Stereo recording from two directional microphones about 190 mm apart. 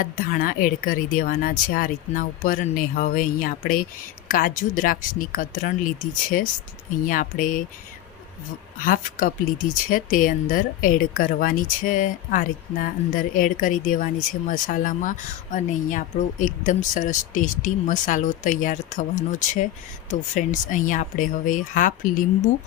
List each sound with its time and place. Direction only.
0.0 s speech: 50° left (ahead or behind)
8.8 s speech: 45° left (ahead or behind)